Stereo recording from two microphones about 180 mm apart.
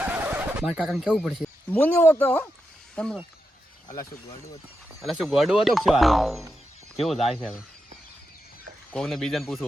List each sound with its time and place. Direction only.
0.0 s a sound: 10° right (ahead or behind)
1.7 s speech: 10° left (ahead or behind)
3.8 s speech: 20° left (ahead or behind)
5.0 s speech: centre (ahead or behind)
8.9 s speech: centre (ahead or behind)